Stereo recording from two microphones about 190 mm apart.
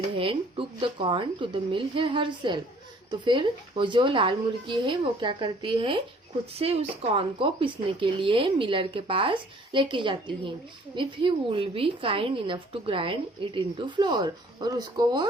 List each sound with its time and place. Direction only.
0.2 s a woman's voice: 25° right (ahead or behind)